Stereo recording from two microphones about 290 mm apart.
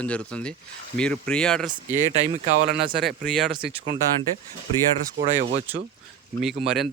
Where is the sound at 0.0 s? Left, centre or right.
Centre.